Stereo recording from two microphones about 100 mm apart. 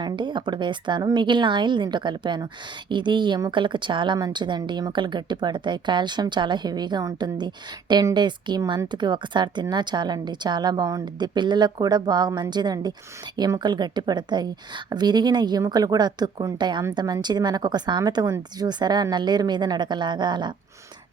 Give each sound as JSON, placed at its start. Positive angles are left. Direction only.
{"t": 0.0, "sound": "a woman's voice", "side_deg": -50}